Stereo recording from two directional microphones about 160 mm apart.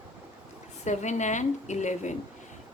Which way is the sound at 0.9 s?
50° left (ahead or behind).